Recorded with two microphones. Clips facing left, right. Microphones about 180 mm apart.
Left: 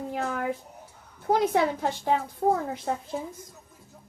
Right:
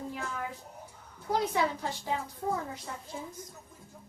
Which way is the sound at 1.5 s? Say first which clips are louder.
Left 6 dB; 65° left (ahead or behind).